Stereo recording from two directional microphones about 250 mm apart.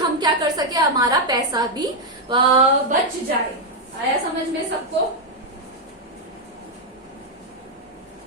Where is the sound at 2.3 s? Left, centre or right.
Centre.